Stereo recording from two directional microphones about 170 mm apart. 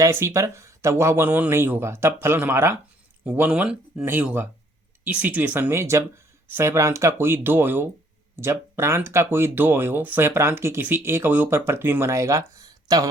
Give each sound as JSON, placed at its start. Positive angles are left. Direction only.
{"t": 0.0, "sound": "speech", "side_deg": -15}